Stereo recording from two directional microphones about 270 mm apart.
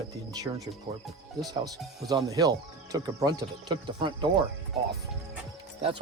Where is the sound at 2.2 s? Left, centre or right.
Centre.